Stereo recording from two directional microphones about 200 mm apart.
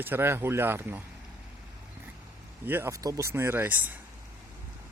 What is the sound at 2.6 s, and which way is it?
Speech, 10° right (ahead or behind).